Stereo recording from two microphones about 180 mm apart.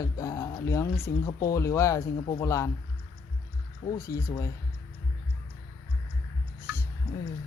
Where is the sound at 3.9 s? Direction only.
15° left (ahead or behind).